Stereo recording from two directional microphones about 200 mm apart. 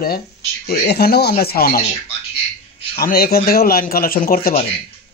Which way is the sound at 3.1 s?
50° left (ahead or behind).